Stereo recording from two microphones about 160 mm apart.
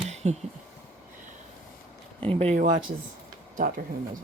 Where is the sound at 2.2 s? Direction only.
40° right (ahead or behind).